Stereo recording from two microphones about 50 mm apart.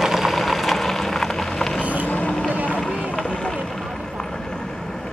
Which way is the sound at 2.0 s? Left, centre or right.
Left.